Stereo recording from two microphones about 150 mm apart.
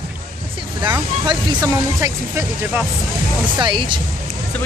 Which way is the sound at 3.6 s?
30° right (ahead or behind).